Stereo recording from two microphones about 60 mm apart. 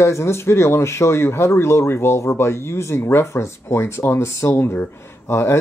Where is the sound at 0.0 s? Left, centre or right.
Left.